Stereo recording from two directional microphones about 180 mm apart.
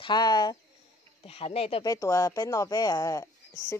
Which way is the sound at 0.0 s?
25° left (ahead or behind).